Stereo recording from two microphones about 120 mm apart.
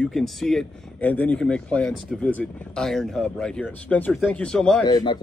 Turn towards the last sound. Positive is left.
turn(degrees=35)  # may be behind; listen again after turning